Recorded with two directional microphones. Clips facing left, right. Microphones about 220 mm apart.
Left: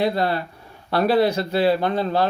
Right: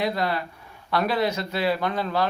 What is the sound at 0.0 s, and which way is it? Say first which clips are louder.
Speech: left 4 dB; 30° left (ahead or behind).